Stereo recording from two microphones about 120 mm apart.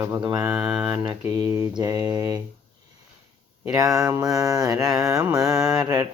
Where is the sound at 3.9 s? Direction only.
30° right (ahead or behind).